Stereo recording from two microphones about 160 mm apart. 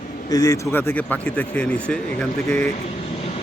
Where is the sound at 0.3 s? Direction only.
20° left (ahead or behind).